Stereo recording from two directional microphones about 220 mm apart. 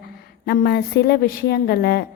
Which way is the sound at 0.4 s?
45° left (ahead or behind).